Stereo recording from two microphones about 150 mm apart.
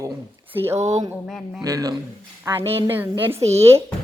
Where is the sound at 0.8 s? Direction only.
50° right (ahead or behind).